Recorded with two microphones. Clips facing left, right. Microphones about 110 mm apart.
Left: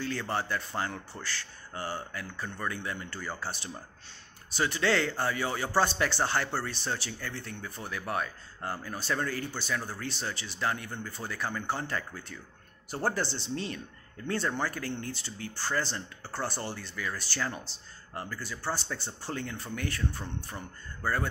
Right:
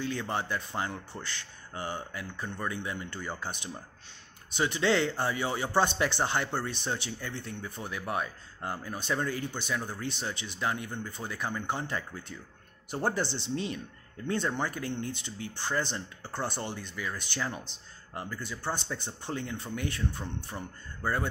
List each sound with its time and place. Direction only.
0.0 s a man's voice: 15° right (ahead or behind)